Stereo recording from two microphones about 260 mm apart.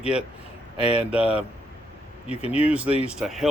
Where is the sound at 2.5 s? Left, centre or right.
Centre.